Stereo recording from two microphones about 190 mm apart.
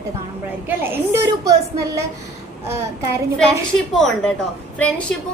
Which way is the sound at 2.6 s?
15° right (ahead or behind).